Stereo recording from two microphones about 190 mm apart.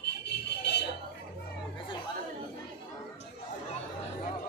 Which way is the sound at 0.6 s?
60° left (ahead or behind).